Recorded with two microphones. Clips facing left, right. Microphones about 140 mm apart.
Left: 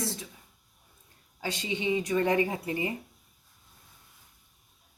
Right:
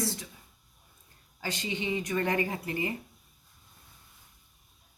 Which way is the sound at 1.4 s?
20° left (ahead or behind).